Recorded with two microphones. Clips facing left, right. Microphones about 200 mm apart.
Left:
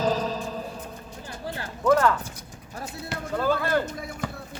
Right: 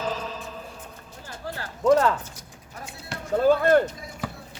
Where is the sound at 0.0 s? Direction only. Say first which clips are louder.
Left 5 dB; 35° left (ahead or behind).